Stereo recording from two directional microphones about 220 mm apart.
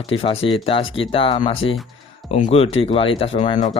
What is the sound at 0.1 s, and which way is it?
Speech, 25° left (ahead or behind).